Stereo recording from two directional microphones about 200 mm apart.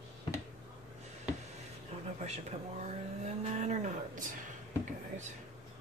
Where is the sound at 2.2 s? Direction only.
35° right (ahead or behind).